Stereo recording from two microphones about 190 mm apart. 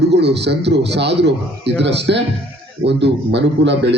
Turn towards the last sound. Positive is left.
turn(degrees=-65)  # may be behind; listen again after turning